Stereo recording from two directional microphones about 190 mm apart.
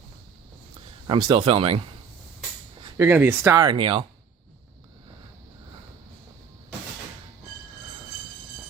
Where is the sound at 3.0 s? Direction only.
10° right (ahead or behind); by 4.0 s 25° right (ahead or behind).